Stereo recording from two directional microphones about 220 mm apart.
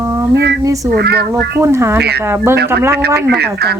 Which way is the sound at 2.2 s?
10° right (ahead or behind).